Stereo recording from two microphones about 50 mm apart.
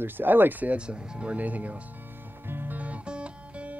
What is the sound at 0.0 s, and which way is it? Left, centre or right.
Speech, right.